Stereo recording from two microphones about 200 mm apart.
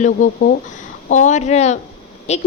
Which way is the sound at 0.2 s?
40° left (ahead or behind).